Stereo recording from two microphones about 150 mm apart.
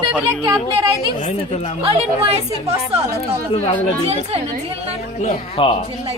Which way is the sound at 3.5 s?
45° left (ahead or behind).